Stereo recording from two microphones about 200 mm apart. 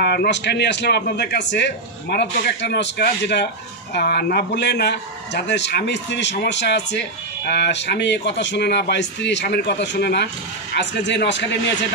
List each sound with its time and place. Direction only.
0.0 s a man's voice: 55° left (ahead or behind)